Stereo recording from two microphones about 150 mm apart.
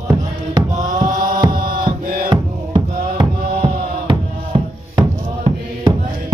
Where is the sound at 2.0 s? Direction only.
70° right (ahead or behind).